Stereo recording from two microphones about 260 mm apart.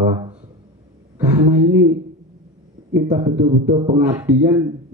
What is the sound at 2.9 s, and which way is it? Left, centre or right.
Speech, centre.